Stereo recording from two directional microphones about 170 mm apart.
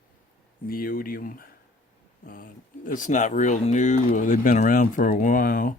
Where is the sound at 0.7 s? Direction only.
60° left (ahead or behind).